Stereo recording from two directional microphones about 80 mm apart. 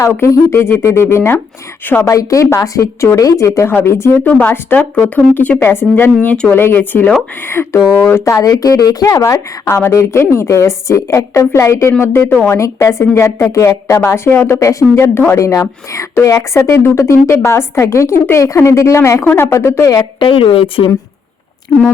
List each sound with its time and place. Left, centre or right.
0.2 s a woman's voice: left
2.0 s a woman's voice: left
4.2 s a woman's voice: left
6.2 s speech: centre
6.5 s a woman's voice: left
8.1 s speech: left
9.6 s a woman's voice: left
19.2 s a woman's voice: left
20.1 s speech: left